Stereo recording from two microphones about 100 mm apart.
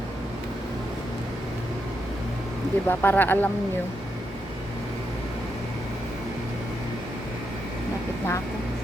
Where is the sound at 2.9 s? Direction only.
20° left (ahead or behind).